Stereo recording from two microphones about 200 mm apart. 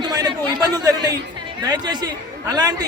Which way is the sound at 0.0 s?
20° right (ahead or behind).